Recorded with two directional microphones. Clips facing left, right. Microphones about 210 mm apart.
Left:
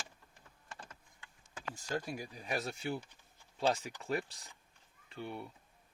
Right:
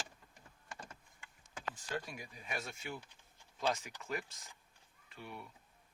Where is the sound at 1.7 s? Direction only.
35° left (ahead or behind).